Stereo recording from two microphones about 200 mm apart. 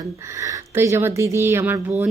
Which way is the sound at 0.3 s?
15° right (ahead or behind).